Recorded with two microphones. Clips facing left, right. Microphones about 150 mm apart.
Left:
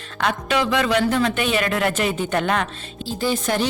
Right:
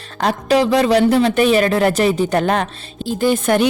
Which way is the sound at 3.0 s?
50° right (ahead or behind).